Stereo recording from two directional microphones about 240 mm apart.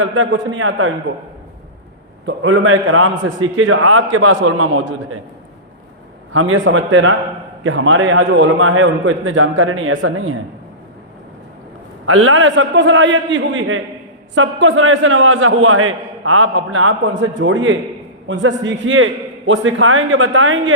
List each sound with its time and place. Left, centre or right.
0.0 s a man's voice: right
2.2 s a man's voice: right
6.3 s a man's voice: right
12.0 s a man's voice: right